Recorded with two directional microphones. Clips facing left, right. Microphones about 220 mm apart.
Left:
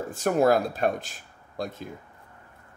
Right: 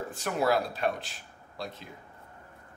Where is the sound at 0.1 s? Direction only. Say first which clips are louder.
Left 7 dB; 45° left (ahead or behind).